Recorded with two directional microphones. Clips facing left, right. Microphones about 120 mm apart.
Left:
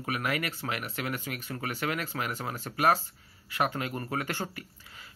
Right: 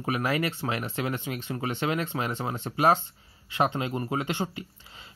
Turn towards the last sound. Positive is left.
turn(degrees=-20)  # may be behind; listen again after turning